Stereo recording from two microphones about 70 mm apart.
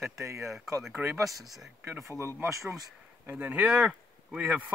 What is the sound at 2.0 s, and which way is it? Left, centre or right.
Speech, right.